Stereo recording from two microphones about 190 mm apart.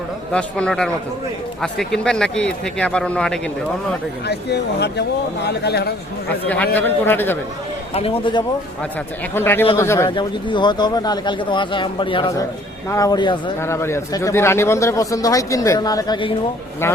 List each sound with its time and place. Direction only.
0.3 s speech: 5° left (ahead or behind)
4.3 s speech: 60° left (ahead or behind)
6.5 s a man's voice: 10° left (ahead or behind)
7.9 s speech: 30° left (ahead or behind)
9.3 s a man's voice: 10° left (ahead or behind)
10.1 s a man's voice: 25° left (ahead or behind)